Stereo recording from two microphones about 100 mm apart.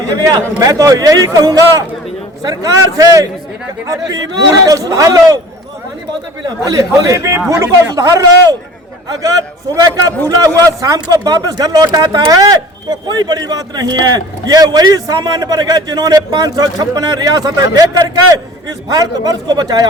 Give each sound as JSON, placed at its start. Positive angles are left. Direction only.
{"t": 0.2, "sound": "speech", "side_deg": -40}
{"t": 6.4, "sound": "speech", "side_deg": -35}
{"t": 9.7, "sound": "speech", "side_deg": -40}